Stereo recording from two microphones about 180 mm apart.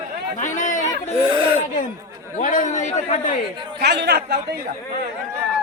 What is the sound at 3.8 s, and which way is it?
Chatter, 65° right (ahead or behind).